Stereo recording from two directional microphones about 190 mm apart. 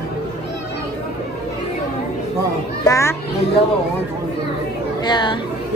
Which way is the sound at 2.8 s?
15° left (ahead or behind).